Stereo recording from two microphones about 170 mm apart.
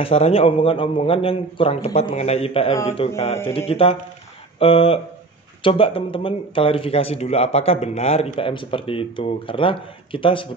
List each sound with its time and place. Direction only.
0.0 s speech: 35° left (ahead or behind)